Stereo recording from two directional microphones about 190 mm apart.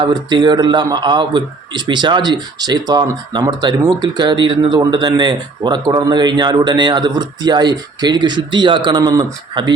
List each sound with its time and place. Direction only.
0.0 s a man's voice: 20° right (ahead or behind)